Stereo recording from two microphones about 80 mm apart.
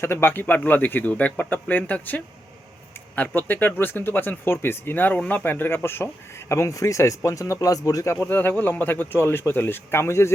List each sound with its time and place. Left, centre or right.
0.0 s speech: left
8.1 s speech: left